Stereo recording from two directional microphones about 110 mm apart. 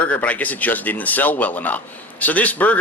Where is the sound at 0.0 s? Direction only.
15° left (ahead or behind).